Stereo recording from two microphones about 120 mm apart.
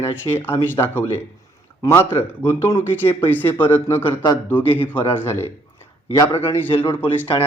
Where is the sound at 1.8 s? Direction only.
30° left (ahead or behind).